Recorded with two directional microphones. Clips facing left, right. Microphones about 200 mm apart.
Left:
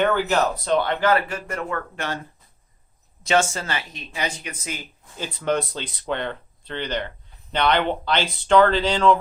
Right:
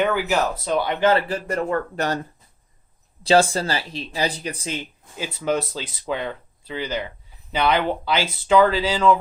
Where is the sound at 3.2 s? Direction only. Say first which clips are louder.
Right 4 dB; 35° right (ahead or behind).